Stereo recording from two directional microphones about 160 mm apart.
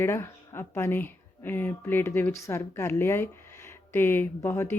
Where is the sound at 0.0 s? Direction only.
15° left (ahead or behind).